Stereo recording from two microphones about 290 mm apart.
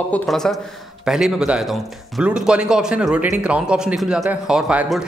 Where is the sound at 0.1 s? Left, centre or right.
Centre.